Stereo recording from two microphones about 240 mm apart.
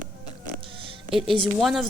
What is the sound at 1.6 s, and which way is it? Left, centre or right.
Speech, centre.